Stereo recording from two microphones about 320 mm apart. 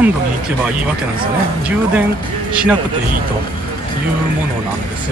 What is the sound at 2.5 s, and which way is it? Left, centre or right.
Speech, centre.